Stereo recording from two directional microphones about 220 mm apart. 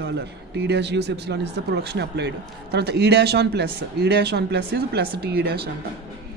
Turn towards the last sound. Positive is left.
turn(degrees=-45)  # may be behind; listen again after turning